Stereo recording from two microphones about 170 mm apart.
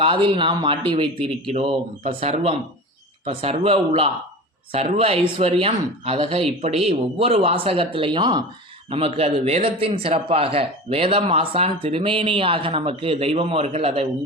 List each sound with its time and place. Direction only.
0.0 s a man's voice: 30° right (ahead or behind)